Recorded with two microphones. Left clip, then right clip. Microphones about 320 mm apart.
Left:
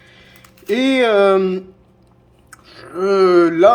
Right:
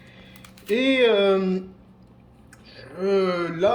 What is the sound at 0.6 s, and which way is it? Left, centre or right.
Speech, centre.